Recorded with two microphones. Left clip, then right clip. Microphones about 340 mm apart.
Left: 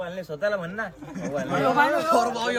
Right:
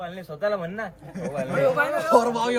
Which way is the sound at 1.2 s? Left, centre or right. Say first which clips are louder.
Right 1 dB; right.